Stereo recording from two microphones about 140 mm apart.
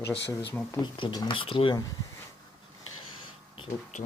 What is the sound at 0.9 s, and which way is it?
Speech, 30° left (ahead or behind).